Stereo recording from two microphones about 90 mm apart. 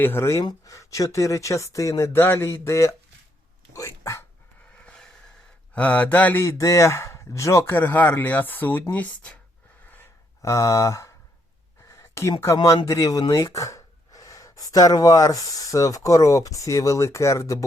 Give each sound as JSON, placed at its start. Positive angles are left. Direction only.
{"t": 0.0, "sound": "speech", "side_deg": 25}
{"t": 4.8, "sound": "a sound", "side_deg": 10}
{"t": 5.7, "sound": "speech", "side_deg": 15}
{"t": 6.4, "sound": "speech", "side_deg": 35}
{"t": 10.4, "sound": "speech", "side_deg": 35}
{"t": 11.9, "sound": "a sound", "side_deg": 30}
{"t": 12.6, "sound": "speech", "side_deg": 35}